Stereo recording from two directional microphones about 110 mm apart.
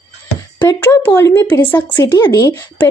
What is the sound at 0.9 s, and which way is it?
Speech, 30° left (ahead or behind).